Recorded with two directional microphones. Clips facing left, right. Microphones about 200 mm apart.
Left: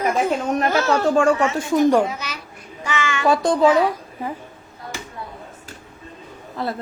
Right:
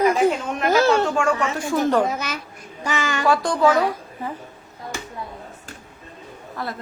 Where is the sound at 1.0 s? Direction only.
35° left (ahead or behind); by 2.0 s 15° left (ahead or behind).